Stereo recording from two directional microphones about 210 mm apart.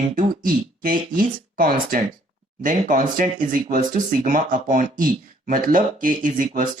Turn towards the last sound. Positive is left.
turn(degrees=-40)  # may be behind; listen again after turning